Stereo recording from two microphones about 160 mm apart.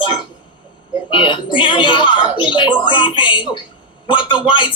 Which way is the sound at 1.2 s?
30° left (ahead or behind).